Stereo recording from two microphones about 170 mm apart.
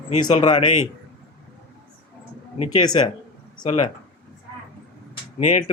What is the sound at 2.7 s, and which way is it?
Speech, 25° left (ahead or behind).